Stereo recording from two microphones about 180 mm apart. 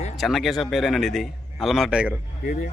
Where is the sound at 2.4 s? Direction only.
50° left (ahead or behind).